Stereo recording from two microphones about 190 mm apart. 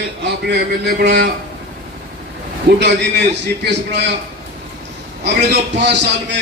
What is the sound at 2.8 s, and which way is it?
A man's voice, 65° right (ahead or behind).